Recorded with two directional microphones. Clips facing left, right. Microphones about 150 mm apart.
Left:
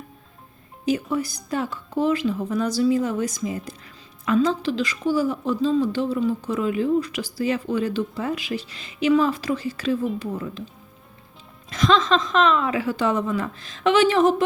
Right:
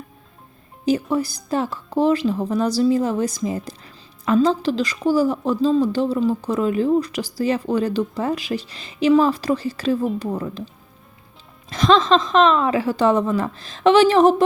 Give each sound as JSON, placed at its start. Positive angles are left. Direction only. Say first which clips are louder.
{"t": 1.1, "sound": "a woman's voice", "louder": "right 4 dB", "side_deg": -35}
{"t": 11.7, "sound": "a woman's voice", "louder": "right 4 dB", "side_deg": -30}